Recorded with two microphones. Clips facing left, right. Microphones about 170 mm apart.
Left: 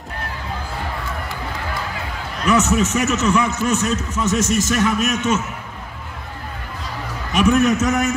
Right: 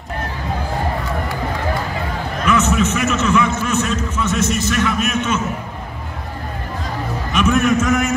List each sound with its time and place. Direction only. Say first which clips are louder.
2.4 s a man's voice: even; 40° left (ahead or behind)
7.3 s a man's voice: even; 40° left (ahead or behind)